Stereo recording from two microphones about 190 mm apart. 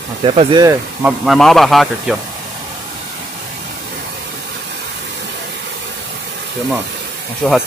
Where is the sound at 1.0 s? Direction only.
Centre (ahead or behind).